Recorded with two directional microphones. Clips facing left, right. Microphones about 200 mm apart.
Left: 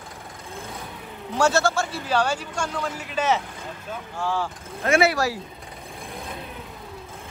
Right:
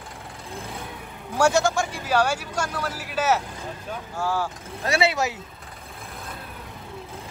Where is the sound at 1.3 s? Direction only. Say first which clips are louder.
Right 1 dB; 15° right (ahead or behind).